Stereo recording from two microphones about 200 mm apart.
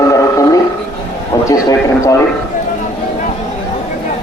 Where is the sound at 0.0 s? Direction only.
15° left (ahead or behind).